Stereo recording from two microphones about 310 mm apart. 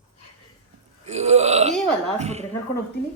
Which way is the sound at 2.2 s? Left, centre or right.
Right.